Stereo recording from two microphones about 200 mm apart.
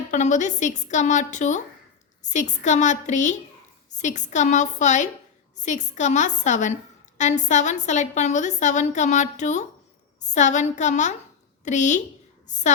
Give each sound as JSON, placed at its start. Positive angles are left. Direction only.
{"t": 0.1, "sound": "a woman's voice", "side_deg": 35}